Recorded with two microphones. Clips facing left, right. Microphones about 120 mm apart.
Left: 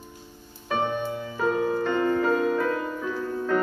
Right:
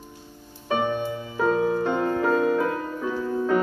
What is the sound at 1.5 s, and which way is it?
Music, 20° right (ahead or behind).